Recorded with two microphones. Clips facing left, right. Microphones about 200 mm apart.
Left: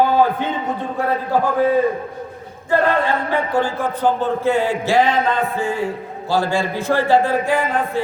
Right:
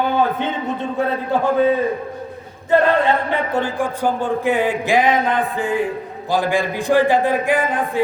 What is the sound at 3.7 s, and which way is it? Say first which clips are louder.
A man's voice: left 1 dB; 15° right (ahead or behind).